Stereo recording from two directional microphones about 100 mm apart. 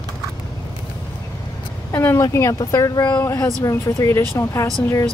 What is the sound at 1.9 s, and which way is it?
Speech, 25° left (ahead or behind).